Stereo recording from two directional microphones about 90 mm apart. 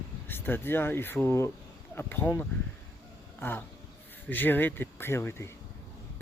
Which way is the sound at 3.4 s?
25° left (ahead or behind).